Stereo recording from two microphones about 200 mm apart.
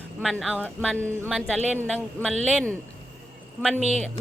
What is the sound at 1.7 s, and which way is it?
Speech, 10° left (ahead or behind).